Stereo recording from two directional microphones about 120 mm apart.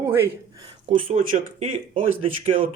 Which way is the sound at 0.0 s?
20° right (ahead or behind).